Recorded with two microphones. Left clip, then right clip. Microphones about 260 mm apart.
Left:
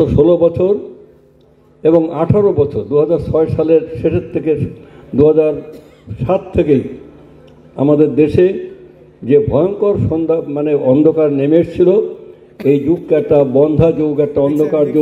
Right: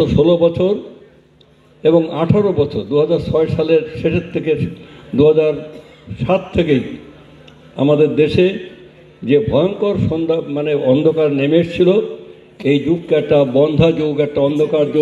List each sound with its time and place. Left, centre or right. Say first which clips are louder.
0.0 s a man's voice: left 2 dB; left
1.9 s a man's voice: left 2 dB; left